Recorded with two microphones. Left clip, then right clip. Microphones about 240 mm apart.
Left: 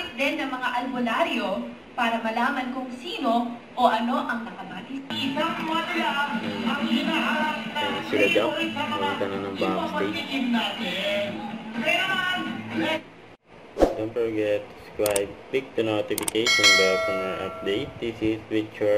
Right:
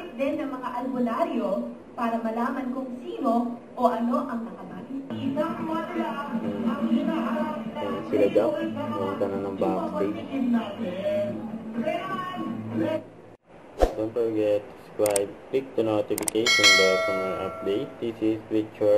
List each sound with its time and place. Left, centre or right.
0.2 s a woman's voice: centre
13.8 s a sound: centre
14.4 s speech: centre